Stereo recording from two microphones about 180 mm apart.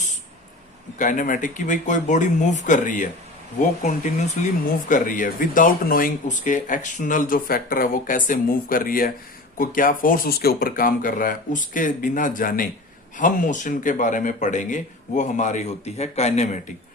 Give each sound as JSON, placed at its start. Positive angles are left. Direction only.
{"t": 0.9, "sound": "speech", "side_deg": 45}